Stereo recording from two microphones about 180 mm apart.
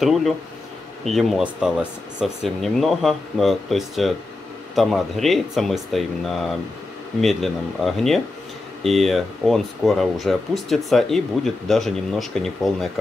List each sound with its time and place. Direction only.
0.0 s speech: centre (ahead or behind)